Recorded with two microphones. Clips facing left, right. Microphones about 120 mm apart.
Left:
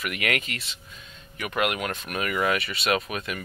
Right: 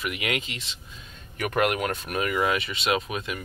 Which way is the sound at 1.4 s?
40° right (ahead or behind).